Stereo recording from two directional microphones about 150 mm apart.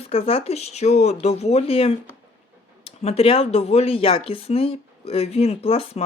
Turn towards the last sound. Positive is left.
turn(degrees=40)  # may be behind; listen again after turning